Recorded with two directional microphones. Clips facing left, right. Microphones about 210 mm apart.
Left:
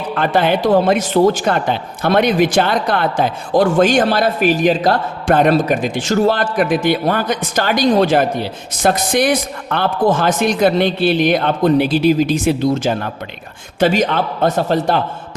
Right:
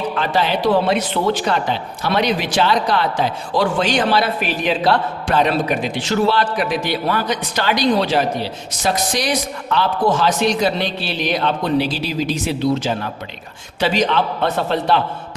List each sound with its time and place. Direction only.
0.1 s speech: 55° left (ahead or behind)